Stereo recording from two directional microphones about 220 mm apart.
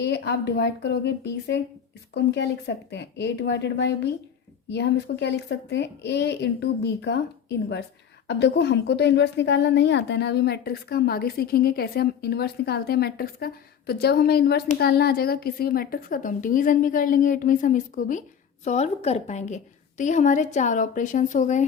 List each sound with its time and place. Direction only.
0.0 s a woman's voice: 50° left (ahead or behind); by 21.6 s 35° left (ahead or behind)